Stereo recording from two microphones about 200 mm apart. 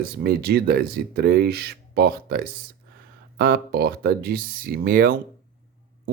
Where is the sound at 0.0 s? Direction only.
50° right (ahead or behind).